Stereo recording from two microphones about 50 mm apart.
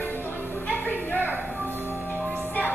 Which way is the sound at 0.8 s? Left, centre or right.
Left.